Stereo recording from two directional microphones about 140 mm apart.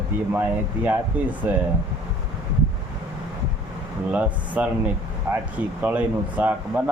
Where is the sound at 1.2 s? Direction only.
10° right (ahead or behind).